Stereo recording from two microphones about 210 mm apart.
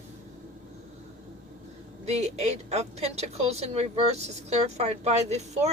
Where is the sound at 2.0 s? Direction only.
30° right (ahead or behind).